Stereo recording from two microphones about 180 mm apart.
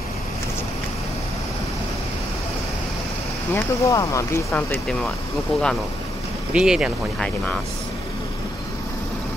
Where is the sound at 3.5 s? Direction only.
15° left (ahead or behind).